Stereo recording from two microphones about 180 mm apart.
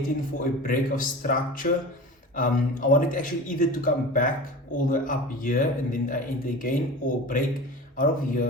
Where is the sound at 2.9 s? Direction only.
50° left (ahead or behind).